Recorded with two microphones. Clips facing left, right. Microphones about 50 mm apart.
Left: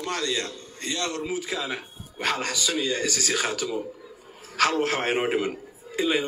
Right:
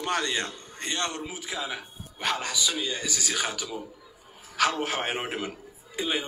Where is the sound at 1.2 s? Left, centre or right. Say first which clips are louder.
Left 5 dB; left.